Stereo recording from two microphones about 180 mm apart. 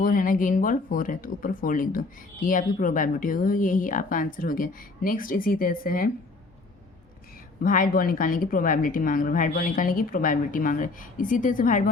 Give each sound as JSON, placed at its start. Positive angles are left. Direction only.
{"t": 0.0, "sound": "speech", "side_deg": 50}
{"t": 7.6, "sound": "speech", "side_deg": 50}